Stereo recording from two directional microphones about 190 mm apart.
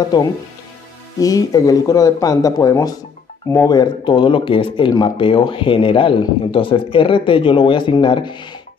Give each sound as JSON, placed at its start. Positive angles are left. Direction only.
{"t": 1.2, "sound": "speech", "side_deg": 20}